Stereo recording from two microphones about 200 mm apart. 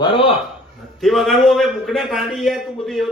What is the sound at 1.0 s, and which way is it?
A man's voice, centre (ahead or behind).